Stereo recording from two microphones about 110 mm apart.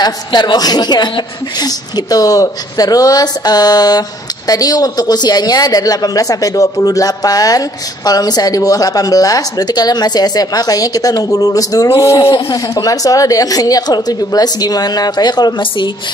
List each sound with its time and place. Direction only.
0.0 s speech: 40° left (ahead or behind)